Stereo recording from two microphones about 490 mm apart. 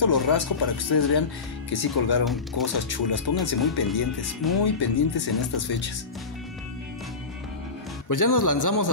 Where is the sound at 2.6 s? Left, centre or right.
Left.